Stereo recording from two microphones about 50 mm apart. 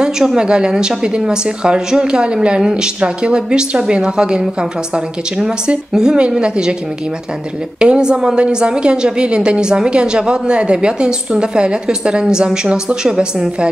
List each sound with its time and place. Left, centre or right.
0.0 s a woman's voice: centre
7.8 s a woman's voice: centre